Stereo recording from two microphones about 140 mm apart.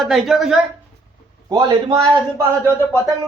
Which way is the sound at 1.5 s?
25° right (ahead or behind).